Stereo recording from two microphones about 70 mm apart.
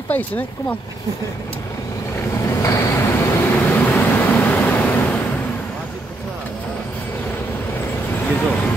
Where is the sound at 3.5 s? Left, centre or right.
Centre.